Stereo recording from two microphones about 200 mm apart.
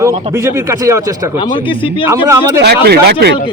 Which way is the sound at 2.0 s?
15° right (ahead or behind).